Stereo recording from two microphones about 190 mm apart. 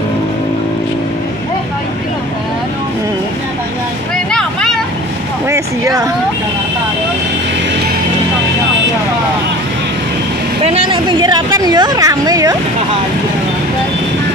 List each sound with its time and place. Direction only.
4.3 s vehicle: 5° left (ahead or behind)
5.5 s vehicle: 15° right (ahead or behind)
10.6 s speech: 30° right (ahead or behind)